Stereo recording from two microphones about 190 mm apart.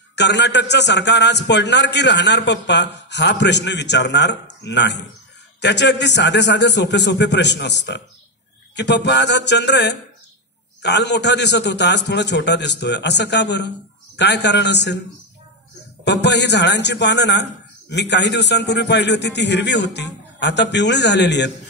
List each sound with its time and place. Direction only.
0.1 s a man's voice: 65° left (ahead or behind)
16.0 s a man's voice: 65° left (ahead or behind)